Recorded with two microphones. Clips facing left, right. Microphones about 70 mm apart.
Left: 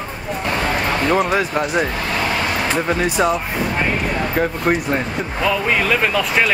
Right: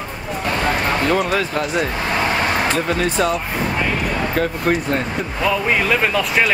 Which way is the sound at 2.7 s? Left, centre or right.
Centre.